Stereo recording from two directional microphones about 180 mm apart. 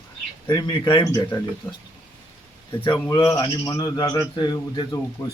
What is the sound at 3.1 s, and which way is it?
Speech, 25° left (ahead or behind).